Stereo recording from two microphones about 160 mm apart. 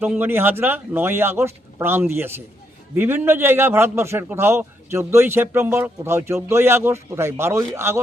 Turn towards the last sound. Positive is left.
turn(degrees=-15)  # may be behind; listen again after turning